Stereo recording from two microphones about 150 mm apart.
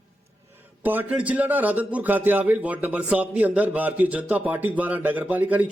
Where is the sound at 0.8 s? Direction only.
10° right (ahead or behind).